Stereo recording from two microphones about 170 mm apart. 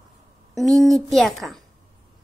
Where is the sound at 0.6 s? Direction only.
Centre (ahead or behind).